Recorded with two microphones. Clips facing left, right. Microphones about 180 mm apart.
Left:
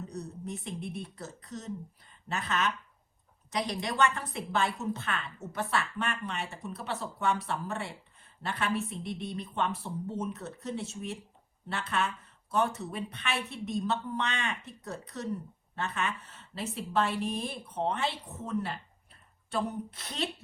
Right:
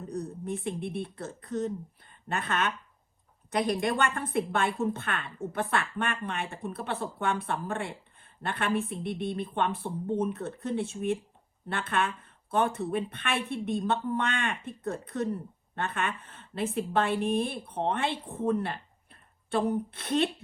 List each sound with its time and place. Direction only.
0.1 s speech: 55° right (ahead or behind)